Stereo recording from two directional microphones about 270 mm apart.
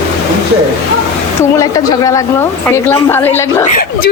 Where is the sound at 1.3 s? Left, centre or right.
Centre.